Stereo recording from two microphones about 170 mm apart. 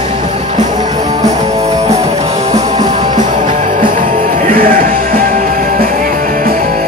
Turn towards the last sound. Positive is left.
turn(degrees=-60)  # may be behind; listen again after turning